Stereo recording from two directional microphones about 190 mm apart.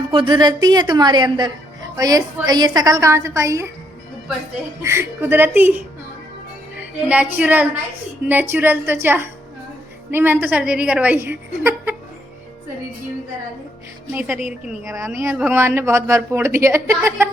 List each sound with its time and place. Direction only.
0.1 s a woman's voice: 25° right (ahead or behind)
4.8 s a woman's voice: 15° right (ahead or behind)
7.1 s a woman's voice: 5° right (ahead or behind)
14.1 s a woman's voice: 10° right (ahead or behind)